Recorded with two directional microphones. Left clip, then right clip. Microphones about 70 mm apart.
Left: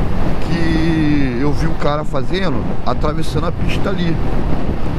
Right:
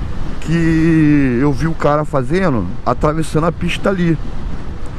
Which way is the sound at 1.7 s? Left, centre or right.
Right.